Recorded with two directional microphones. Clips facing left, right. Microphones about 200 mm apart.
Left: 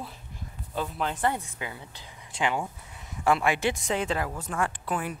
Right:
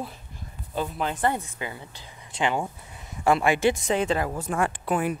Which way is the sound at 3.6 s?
Centre (ahead or behind).